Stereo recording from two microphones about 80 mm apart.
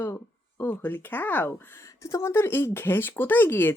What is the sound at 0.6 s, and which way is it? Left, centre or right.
Speech, left.